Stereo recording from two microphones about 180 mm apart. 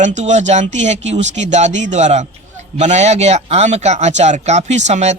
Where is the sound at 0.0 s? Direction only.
40° right (ahead or behind).